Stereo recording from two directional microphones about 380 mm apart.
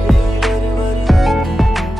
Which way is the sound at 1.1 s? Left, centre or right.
Centre.